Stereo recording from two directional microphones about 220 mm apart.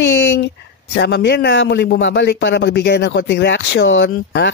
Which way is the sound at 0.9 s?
50° left (ahead or behind).